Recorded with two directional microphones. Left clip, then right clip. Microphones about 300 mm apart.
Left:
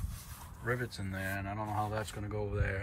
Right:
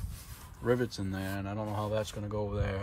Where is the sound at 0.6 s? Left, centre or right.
Centre.